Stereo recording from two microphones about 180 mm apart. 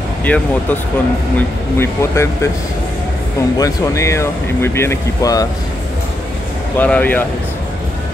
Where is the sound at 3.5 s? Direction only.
20° left (ahead or behind).